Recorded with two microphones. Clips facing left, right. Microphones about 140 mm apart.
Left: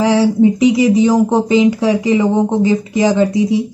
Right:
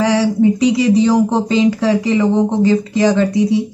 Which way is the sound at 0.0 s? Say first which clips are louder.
Left 2 dB; 20° left (ahead or behind).